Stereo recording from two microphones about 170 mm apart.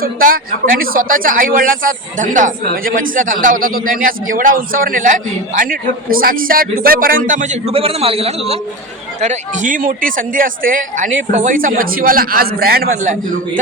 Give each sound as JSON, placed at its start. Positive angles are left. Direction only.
{"t": 0.0, "sound": "speech", "side_deg": -55}
{"t": 6.1, "sound": "speech", "side_deg": -60}
{"t": 7.7, "sound": "a man's voice", "side_deg": -35}